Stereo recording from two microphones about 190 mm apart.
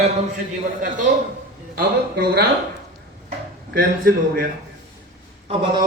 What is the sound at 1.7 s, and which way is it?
Speech, 50° right (ahead or behind).